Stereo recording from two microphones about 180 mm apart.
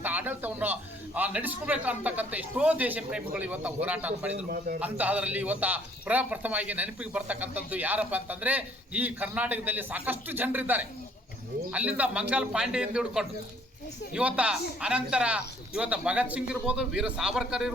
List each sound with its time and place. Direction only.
0.0 s a man's voice: 10° right (ahead or behind)
4.4 s a man's voice: 50° right (ahead or behind)
4.8 s a man's voice: 10° right (ahead or behind)